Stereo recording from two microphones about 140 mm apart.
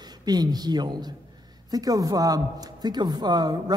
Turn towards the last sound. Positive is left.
turn(degrees=-30)  # may be behind; listen again after turning